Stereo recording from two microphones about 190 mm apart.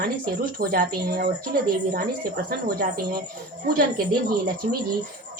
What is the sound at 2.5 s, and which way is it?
A woman's voice, 50° right (ahead or behind).